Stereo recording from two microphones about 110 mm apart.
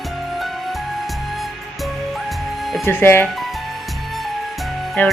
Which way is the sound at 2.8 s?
20° left (ahead or behind).